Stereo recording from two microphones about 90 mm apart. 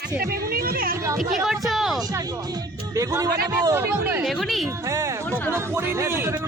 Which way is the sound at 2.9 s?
40° right (ahead or behind).